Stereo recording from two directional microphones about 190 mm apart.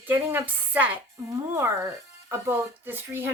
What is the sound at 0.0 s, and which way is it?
Speech, 10° right (ahead or behind).